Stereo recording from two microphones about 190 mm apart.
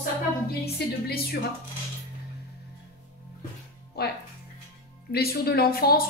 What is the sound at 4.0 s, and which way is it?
Speech, 55° left (ahead or behind).